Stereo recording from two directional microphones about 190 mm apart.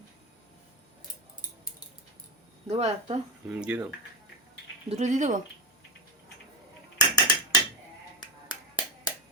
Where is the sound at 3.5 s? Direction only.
5° right (ahead or behind).